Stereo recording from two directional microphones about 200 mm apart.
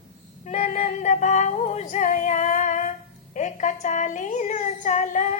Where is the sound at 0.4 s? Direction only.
35° left (ahead or behind).